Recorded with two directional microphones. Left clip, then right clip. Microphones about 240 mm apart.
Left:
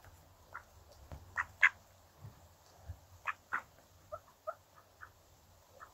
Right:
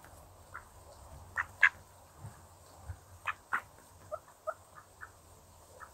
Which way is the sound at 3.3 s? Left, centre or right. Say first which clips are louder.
Right 2 dB; centre.